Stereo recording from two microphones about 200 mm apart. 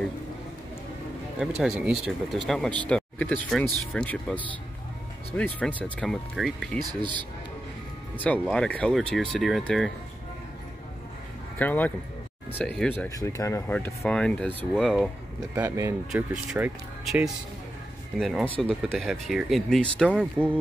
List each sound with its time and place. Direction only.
1.6 s speech: centre (ahead or behind)
6.9 s speech: 25° right (ahead or behind)
8.2 s speech: 5° left (ahead or behind)
11.5 s speech: 10° left (ahead or behind)
15.5 s speech: 10° right (ahead or behind); by 20.2 s 5° left (ahead or behind)
20.2 s speech: 10° right (ahead or behind)